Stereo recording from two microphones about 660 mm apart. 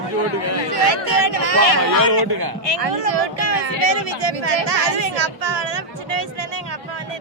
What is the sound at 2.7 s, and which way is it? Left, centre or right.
Speech, right.